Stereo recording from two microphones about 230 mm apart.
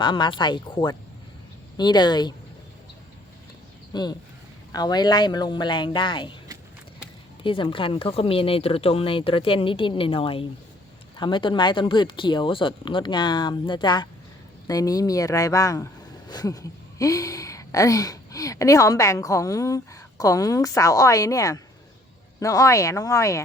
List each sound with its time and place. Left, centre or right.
0.0 s speech: left
3.9 s speech: centre
7.4 s speech: left